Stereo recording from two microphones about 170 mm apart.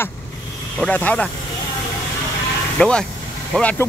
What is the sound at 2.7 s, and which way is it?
Speech, 5° left (ahead or behind).